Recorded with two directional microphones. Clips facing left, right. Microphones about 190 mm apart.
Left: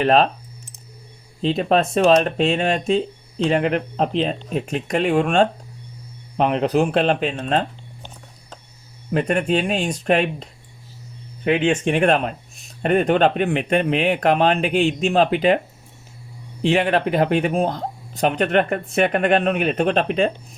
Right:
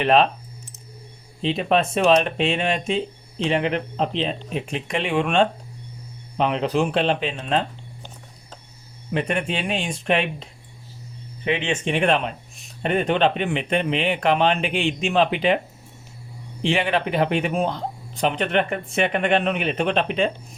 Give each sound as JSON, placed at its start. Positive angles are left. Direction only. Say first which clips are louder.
{"t": 0.0, "sound": "speech", "louder": "left 1 dB", "side_deg": 40}
{"t": 1.4, "sound": "speech", "louder": "left 2 dB", "side_deg": 40}
{"t": 9.1, "sound": "speech", "louder": "left 5 dB", "side_deg": 40}
{"t": 11.4, "sound": "speech", "louder": "left 5 dB", "side_deg": 50}
{"t": 16.6, "sound": "speech", "louder": "left 4 dB", "side_deg": 45}